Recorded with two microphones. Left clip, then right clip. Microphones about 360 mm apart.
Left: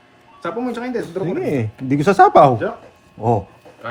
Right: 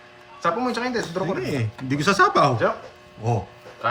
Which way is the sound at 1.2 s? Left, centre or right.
Centre.